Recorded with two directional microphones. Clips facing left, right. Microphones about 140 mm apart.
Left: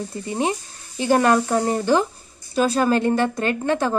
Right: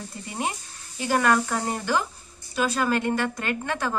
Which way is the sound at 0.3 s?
25° left (ahead or behind).